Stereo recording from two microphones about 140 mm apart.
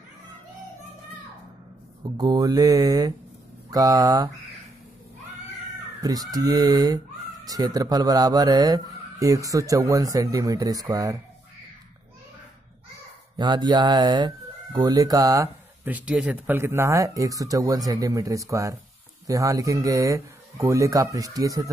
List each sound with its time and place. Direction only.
2.0 s speech: 30° right (ahead or behind)
6.3 s speech: 25° right (ahead or behind)
13.4 s speech: 30° right (ahead or behind)
15.9 s speech: 10° right (ahead or behind)